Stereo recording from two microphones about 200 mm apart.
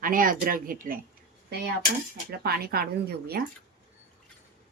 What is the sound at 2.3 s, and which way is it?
Speech, 50° right (ahead or behind).